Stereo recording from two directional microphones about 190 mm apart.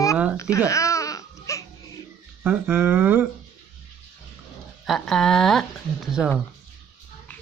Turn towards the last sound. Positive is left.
turn(degrees=0)  # may be behind; listen again after turning